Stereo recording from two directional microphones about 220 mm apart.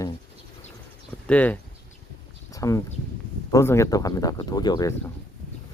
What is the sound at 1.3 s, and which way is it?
Speech, 5° left (ahead or behind).